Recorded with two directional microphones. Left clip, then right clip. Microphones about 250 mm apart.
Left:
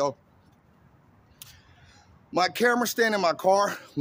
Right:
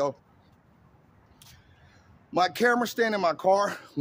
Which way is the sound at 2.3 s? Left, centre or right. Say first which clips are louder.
Even; centre.